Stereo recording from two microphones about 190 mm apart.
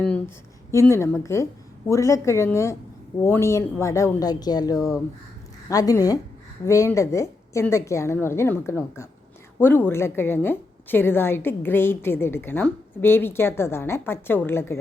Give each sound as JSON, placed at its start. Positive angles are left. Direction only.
{"t": 0.7, "sound": "a woman's voice", "side_deg": 15}